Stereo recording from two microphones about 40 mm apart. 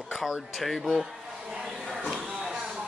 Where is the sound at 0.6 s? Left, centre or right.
Centre.